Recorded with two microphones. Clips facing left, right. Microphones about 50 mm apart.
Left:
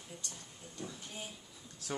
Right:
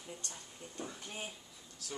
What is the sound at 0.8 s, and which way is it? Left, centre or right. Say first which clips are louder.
Speech: right 1 dB; right.